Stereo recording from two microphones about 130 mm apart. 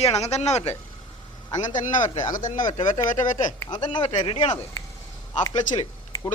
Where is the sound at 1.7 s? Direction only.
75° left (ahead or behind).